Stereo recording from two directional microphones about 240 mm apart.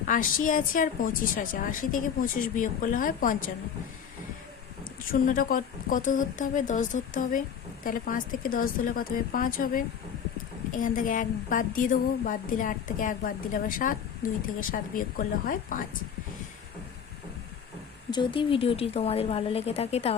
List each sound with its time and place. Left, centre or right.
0.1 s a woman's voice: left
5.2 s a woman's voice: left
18.1 s speech: centre